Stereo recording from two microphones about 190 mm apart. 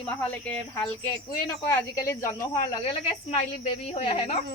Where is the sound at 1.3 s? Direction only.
15° left (ahead or behind).